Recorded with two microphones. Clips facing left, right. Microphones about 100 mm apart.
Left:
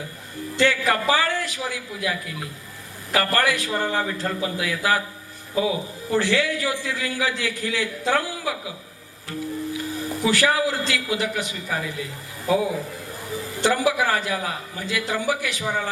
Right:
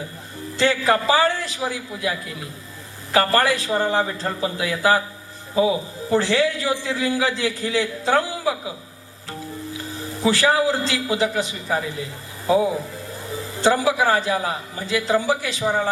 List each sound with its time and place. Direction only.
0.5 s a man's voice: 25° right (ahead or behind)
10.2 s a man's voice: 25° right (ahead or behind)
13.6 s a man's voice: 25° right (ahead or behind)